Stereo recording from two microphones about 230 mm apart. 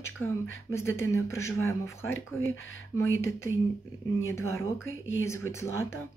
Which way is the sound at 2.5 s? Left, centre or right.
Left.